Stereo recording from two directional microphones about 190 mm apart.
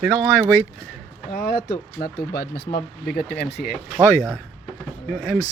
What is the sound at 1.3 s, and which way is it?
Speech, 50° left (ahead or behind).